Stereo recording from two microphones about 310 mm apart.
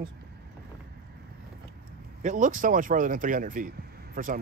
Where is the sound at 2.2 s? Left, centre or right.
Right.